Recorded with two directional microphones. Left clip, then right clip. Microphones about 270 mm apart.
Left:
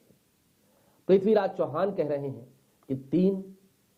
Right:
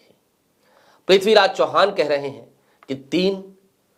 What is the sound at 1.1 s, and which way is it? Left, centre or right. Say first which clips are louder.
Speech: right 9 dB; centre.